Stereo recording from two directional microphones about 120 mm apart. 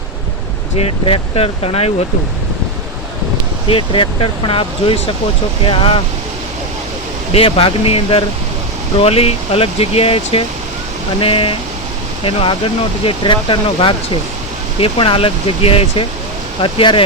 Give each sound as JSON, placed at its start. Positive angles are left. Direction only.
{"t": 0.8, "sound": "speech", "side_deg": 55}
{"t": 3.7, "sound": "speech", "side_deg": 45}
{"t": 7.3, "sound": "speech", "side_deg": 50}